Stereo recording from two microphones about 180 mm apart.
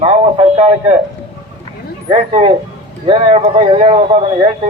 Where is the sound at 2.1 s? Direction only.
35° right (ahead or behind).